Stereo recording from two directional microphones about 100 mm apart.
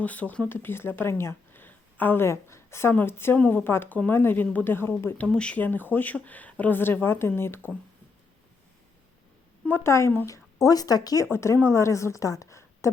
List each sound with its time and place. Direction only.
0.0 s speech: 15° left (ahead or behind)
9.6 s speech: 25° left (ahead or behind)
11.3 s a woman's voice: 25° left (ahead or behind)